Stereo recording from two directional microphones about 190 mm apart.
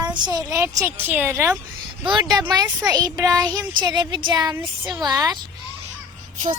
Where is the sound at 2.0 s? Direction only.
25° right (ahead or behind).